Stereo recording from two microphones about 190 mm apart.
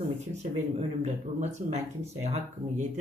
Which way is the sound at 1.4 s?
35° right (ahead or behind).